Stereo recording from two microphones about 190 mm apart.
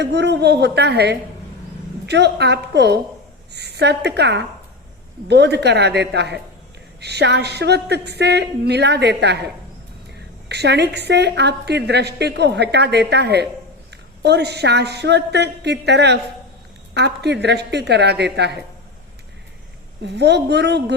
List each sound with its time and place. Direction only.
0.0 s a woman's voice: 60° right (ahead or behind)
10.5 s a woman's voice: 60° right (ahead or behind)
20.0 s a woman's voice: 65° right (ahead or behind)